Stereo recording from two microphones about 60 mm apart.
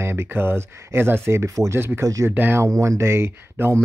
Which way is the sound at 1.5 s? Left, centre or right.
Right.